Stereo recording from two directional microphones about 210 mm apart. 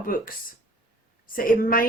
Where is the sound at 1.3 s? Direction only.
40° left (ahead or behind).